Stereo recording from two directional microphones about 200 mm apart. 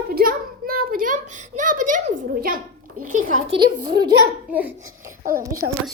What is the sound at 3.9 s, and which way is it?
Speech, 20° right (ahead or behind).